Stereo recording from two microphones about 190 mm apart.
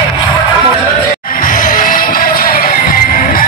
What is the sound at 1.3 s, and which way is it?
Music, 45° left (ahead or behind).